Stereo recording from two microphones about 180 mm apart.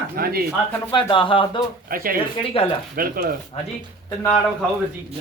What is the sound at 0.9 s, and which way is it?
Speech, 30° left (ahead or behind).